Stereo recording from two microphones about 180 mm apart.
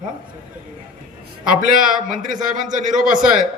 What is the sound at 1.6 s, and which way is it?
A man's voice, 50° right (ahead or behind).